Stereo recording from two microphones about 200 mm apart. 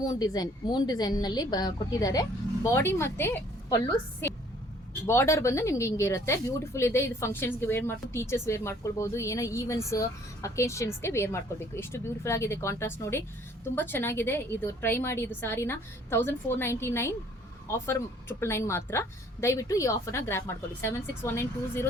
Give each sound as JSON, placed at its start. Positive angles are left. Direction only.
{"t": 0.0, "sound": "a woman's voice", "side_deg": 20}